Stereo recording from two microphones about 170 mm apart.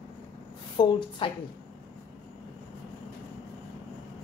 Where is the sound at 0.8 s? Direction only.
25° left (ahead or behind).